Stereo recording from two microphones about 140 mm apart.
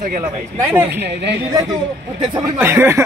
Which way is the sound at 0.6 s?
15° right (ahead or behind).